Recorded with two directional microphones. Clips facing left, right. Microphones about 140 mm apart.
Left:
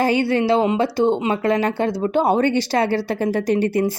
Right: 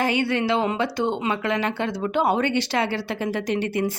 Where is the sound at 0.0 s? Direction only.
35° left (ahead or behind).